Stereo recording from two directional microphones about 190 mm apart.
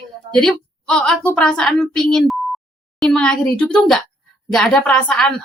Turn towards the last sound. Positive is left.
turn(degrees=5)  # may be behind; listen again after turning